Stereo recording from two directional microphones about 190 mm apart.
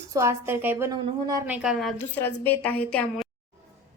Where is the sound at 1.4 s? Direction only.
5° right (ahead or behind).